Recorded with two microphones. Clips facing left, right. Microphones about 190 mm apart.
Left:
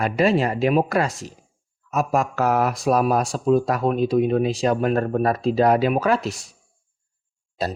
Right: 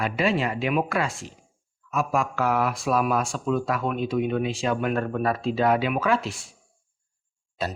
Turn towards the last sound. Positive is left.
turn(degrees=35)  # may be behind; listen again after turning